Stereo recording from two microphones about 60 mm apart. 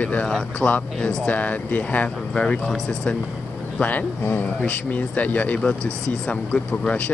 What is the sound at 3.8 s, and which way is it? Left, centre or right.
Speech, left.